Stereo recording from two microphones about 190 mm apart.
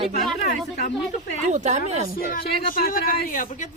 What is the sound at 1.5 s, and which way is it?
Speech, 40° right (ahead or behind).